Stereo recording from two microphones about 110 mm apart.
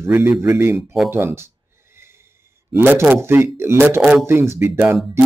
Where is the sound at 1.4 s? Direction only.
20° right (ahead or behind).